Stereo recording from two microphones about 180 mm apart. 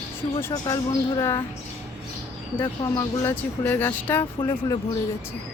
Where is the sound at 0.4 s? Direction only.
20° left (ahead or behind).